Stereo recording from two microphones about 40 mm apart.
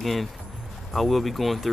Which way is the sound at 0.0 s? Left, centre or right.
Centre.